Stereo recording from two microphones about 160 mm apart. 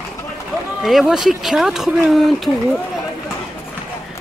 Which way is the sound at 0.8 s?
Centre (ahead or behind).